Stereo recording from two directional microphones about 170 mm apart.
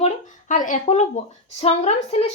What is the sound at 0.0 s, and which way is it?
A woman's voice, 45° left (ahead or behind).